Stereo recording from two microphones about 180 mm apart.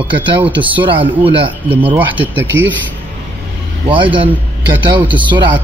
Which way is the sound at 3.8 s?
30° right (ahead or behind).